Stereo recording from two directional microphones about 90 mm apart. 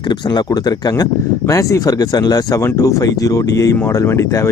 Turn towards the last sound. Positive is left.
turn(degrees=30)  # may be behind; listen again after turning